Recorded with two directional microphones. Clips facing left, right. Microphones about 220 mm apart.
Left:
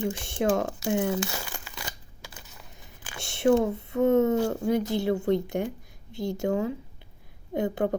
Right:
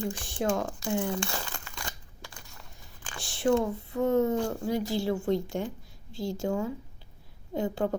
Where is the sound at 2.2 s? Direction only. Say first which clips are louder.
Left 1 dB; 5° left (ahead or behind).